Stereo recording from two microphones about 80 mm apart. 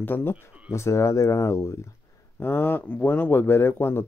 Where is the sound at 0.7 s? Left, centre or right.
Left.